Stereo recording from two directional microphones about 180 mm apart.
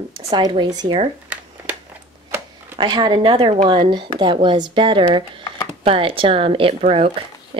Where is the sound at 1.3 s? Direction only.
5° right (ahead or behind).